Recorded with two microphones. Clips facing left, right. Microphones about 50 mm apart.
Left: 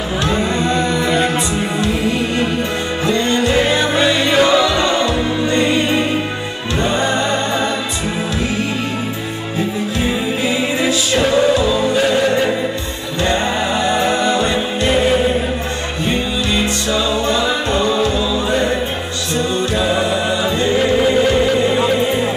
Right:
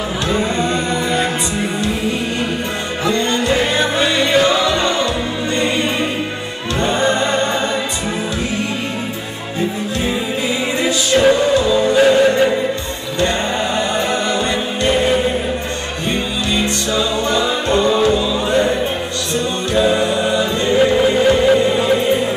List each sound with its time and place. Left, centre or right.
3.1 s music: centre
6.9 s music: centre
11.2 s music: centre
13.9 s music: centre
20.7 s music: centre